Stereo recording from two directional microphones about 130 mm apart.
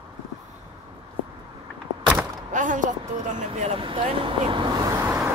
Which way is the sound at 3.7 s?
45° right (ahead or behind).